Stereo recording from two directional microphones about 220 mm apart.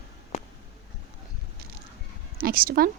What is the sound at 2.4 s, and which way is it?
Speech, 40° right (ahead or behind).